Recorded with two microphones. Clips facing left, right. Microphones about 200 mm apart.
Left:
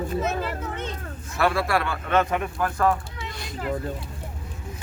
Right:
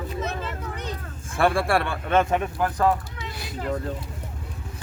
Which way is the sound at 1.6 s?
30° right (ahead or behind).